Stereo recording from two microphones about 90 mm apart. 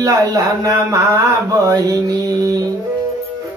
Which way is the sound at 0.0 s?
40° right (ahead or behind).